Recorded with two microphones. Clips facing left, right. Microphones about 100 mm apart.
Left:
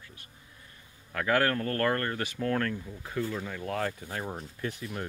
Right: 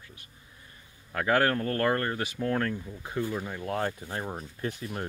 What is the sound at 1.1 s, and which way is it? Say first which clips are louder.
Speech: right 2 dB; 25° right (ahead or behind).